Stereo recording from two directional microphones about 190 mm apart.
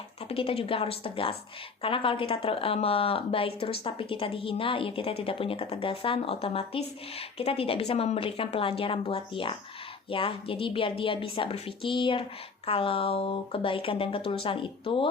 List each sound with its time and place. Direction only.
0.3 s speech: 30° left (ahead or behind)